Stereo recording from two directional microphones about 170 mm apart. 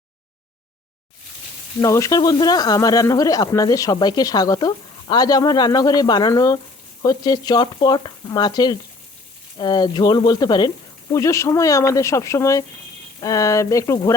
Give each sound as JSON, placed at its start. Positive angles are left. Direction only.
{"t": 1.8, "sound": "speech", "side_deg": 20}